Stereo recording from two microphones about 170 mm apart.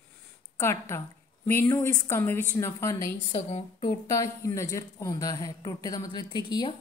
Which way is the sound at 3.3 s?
40° left (ahead or behind).